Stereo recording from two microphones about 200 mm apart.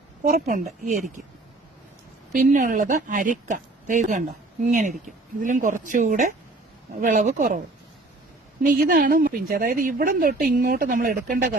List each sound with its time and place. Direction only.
0.3 s speech: 45° right (ahead or behind)
2.3 s speech: 40° right (ahead or behind)
8.6 s speech: 45° right (ahead or behind)